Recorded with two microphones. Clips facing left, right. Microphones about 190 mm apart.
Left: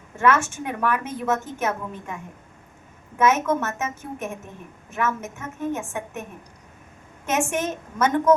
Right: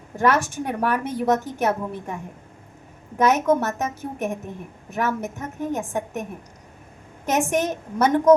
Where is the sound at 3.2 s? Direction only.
35° right (ahead or behind).